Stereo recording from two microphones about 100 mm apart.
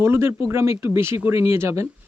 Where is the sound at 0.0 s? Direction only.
25° right (ahead or behind).